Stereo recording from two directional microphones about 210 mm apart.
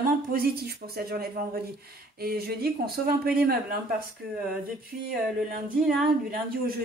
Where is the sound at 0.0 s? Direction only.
45° right (ahead or behind).